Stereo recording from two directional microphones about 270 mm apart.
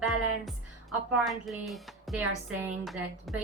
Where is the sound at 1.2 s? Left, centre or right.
Centre.